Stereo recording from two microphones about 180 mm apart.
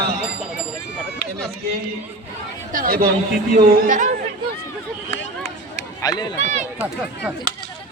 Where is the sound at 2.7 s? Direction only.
55° right (ahead or behind).